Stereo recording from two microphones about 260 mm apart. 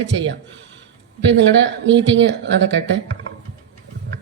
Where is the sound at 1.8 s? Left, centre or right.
Right.